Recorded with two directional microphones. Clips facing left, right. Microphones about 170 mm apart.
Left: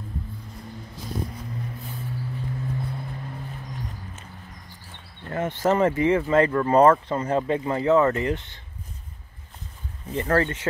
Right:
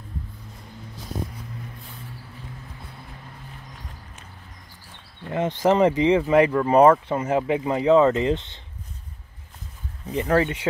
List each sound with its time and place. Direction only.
5.2 s speech: 15° right (ahead or behind)
10.1 s speech: 15° right (ahead or behind)